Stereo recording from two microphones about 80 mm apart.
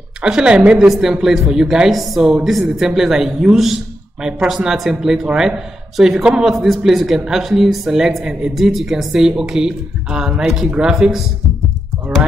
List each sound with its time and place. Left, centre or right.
0.2 s speech: centre